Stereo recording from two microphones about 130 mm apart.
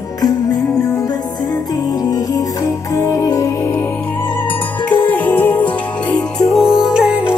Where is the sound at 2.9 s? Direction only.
25° left (ahead or behind).